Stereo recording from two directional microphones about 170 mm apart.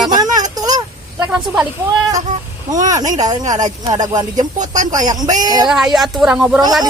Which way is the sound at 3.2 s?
20° right (ahead or behind).